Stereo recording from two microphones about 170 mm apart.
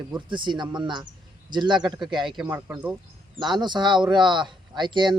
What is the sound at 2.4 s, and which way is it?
Speech, 15° right (ahead or behind).